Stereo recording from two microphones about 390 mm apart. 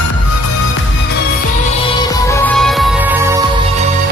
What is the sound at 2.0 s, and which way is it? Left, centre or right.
Music, centre.